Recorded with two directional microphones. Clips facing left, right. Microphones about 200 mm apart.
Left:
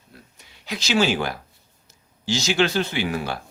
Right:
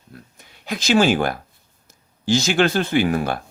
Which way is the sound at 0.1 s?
50° right (ahead or behind).